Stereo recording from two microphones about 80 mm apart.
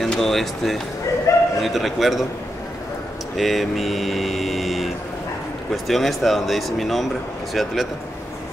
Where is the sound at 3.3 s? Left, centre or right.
Centre.